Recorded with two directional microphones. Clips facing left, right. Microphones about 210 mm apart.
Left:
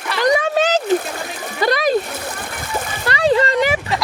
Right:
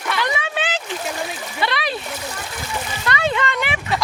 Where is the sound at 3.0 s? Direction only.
35° left (ahead or behind).